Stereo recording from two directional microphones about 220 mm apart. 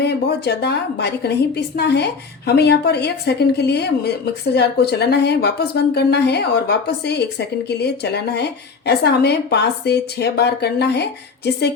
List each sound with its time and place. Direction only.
0.0 s a woman's voice: 50° left (ahead or behind)